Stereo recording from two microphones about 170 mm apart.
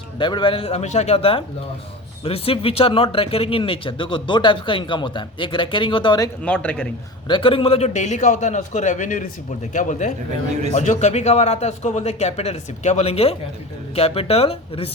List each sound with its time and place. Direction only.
0.2 s speech: 25° left (ahead or behind)
6.4 s a man's voice: 5° left (ahead or behind)
7.3 s a man's voice: 30° left (ahead or behind)